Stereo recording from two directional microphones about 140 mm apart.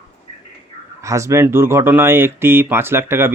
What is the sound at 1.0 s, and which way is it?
Speech, 20° right (ahead or behind).